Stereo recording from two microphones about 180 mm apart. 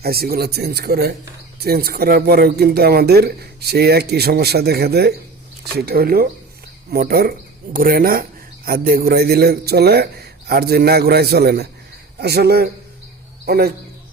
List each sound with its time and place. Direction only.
0.0 s speech: 60° right (ahead or behind)